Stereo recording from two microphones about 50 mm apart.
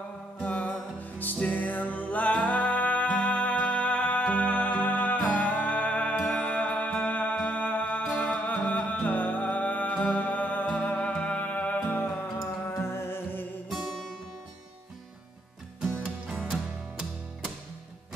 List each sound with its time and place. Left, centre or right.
0.4 s music: left
12.7 s music: left